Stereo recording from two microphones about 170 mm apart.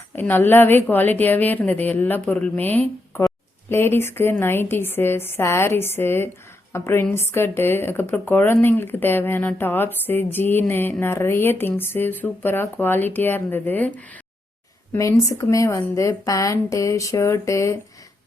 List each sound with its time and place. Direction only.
0.2 s a woman's voice: 10° left (ahead or behind)